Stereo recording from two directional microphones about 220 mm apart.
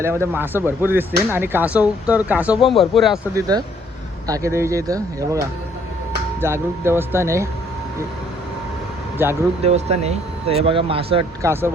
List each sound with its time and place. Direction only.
0.0 s speech: 10° right (ahead or behind)
3.3 s speech: 15° right (ahead or behind)
6.4 s speech: 10° right (ahead or behind)
9.2 s speech: 10° right (ahead or behind)
9.6 s speech: 30° right (ahead or behind)
11.4 s speech: 10° right (ahead or behind)